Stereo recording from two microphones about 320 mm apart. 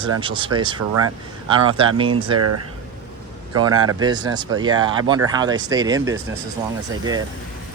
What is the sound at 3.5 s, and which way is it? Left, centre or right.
Speech, centre.